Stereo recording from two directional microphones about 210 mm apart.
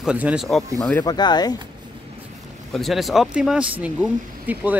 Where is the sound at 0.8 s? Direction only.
15° left (ahead or behind).